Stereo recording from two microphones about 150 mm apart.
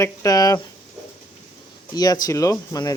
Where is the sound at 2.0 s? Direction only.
25° left (ahead or behind).